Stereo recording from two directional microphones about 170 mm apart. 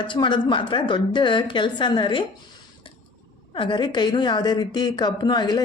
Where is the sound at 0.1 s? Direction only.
30° left (ahead or behind).